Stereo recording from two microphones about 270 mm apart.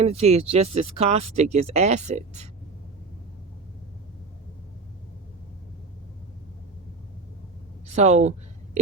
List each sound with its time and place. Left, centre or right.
0.0 s speech: right
7.9 s speech: right